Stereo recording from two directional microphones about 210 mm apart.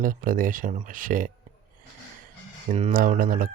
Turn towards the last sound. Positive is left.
turn(degrees=-40)  # may be behind; listen again after turning